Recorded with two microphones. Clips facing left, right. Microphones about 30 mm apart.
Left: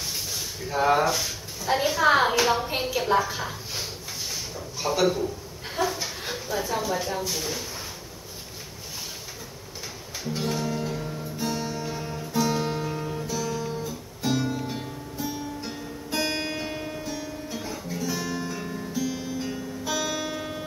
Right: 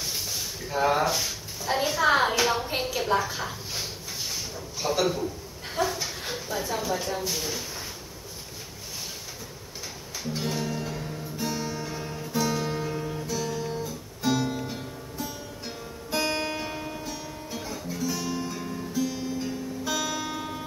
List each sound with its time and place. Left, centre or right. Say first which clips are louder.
0.7 s speech: left 2 dB; centre
10.2 s music: left 2 dB; centre
12.5 s music: left 1 dB; centre
13.3 s music: even; centre
18.9 s music: right 1 dB; centre